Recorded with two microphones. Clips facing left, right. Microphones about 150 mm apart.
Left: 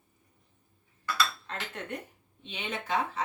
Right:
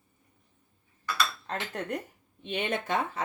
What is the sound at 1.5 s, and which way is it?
Speech, 40° right (ahead or behind).